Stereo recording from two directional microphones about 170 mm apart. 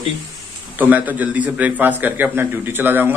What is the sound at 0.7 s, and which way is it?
A man's voice, 10° right (ahead or behind).